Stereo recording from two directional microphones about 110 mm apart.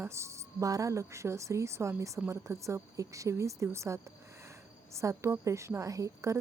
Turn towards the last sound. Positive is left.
turn(degrees=-30)  # may be behind; listen again after turning